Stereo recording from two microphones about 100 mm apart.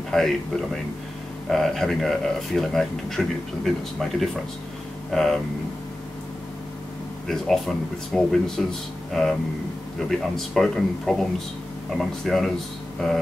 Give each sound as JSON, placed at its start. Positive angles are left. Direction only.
{"t": 0.1, "sound": "speech", "side_deg": 5}
{"t": 7.2, "sound": "speech", "side_deg": 5}